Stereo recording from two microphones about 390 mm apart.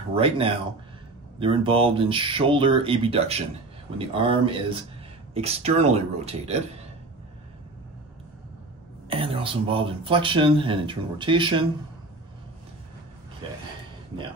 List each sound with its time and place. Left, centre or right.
0.1 s speech: centre
9.1 s speech: centre